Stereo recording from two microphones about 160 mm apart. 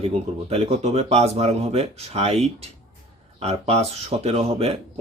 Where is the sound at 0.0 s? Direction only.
40° right (ahead or behind).